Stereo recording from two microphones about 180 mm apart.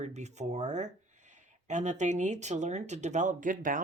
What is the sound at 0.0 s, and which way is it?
Speech, 40° right (ahead or behind).